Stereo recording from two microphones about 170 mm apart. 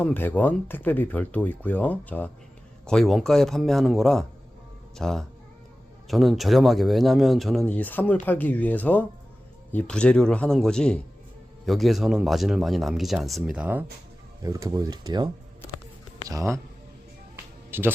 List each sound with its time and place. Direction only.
0.0 s speech: 10° left (ahead or behind); by 13.8 s 10° right (ahead or behind)
14.4 s speech: 20° right (ahead or behind)
17.7 s speech: 15° right (ahead or behind)